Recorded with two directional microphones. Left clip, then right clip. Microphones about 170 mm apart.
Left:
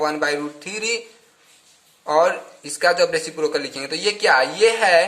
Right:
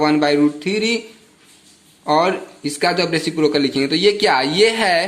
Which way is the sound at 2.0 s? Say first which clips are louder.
Right 1 dB; 10° right (ahead or behind).